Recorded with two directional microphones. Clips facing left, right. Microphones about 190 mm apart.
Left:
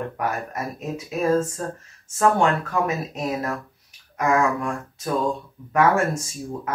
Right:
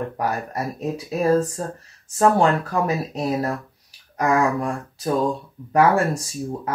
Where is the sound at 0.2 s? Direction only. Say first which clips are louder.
Right 2 dB; 35° right (ahead or behind).